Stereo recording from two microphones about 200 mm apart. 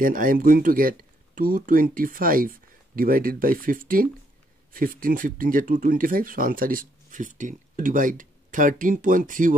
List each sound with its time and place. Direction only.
0.0 s speech: 45° right (ahead or behind)